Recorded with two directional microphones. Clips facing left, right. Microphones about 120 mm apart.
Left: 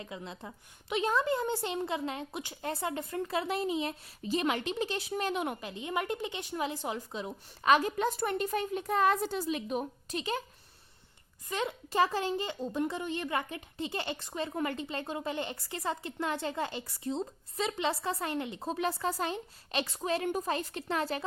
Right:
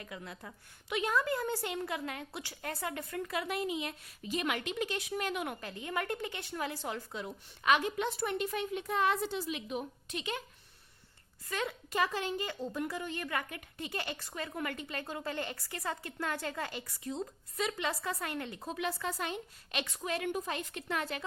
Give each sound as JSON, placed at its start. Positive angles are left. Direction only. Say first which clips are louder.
{"t": 0.0, "sound": "a woman's voice", "louder": "left 3 dB", "side_deg": 25}
{"t": 7.6, "sound": "a woman's voice", "louder": "left 4 dB", "side_deg": 40}
{"t": 11.4, "sound": "a woman's voice", "louder": "left 3 dB", "side_deg": 25}
{"t": 12.5, "sound": "a woman's voice", "louder": "left 4 dB", "side_deg": 25}